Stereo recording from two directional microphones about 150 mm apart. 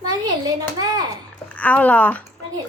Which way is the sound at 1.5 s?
10° left (ahead or behind).